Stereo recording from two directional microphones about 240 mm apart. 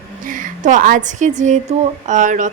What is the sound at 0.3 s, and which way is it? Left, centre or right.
A woman's voice, right.